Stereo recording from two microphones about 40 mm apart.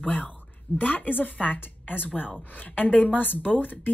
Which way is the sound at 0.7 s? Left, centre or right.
Left.